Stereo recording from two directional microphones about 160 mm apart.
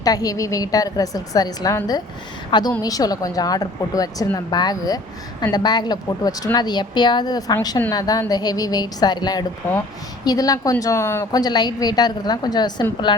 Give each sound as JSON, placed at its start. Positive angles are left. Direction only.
{"t": 0.0, "sound": "a woman's voice", "side_deg": 25}